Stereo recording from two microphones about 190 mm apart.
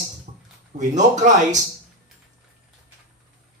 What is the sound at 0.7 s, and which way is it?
Speech, 40° right (ahead or behind).